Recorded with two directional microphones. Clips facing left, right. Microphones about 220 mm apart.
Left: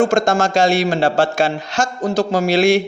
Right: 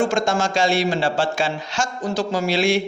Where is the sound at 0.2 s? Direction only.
40° left (ahead or behind).